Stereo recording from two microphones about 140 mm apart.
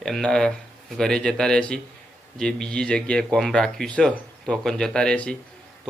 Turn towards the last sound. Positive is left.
turn(degrees=5)  # may be behind; listen again after turning